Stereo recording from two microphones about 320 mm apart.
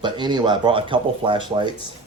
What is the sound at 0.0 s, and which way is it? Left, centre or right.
Speech, centre.